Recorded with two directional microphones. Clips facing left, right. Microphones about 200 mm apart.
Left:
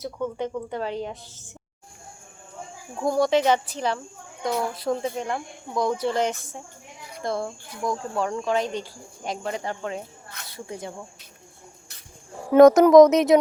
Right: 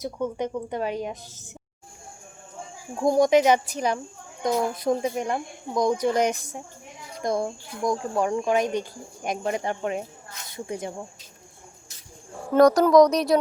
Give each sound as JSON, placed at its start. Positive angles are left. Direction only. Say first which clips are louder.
{"t": 0.0, "sound": "speech", "louder": "right 1 dB", "side_deg": -15}
{"t": 3.0, "sound": "speech", "louder": "right 3 dB", "side_deg": -15}
{"t": 12.5, "sound": "a woman's voice", "louder": "left 4 dB", "side_deg": 20}